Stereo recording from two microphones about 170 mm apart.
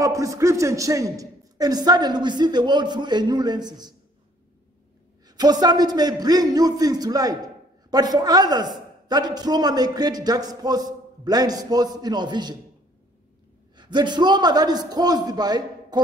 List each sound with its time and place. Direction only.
0.0 s a man's voice: 20° right (ahead or behind)
5.4 s a man's voice: 25° right (ahead or behind)
13.7 s a man's voice: 25° right (ahead or behind)